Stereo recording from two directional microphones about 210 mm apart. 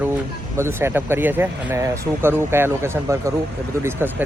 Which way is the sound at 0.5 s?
10° right (ahead or behind).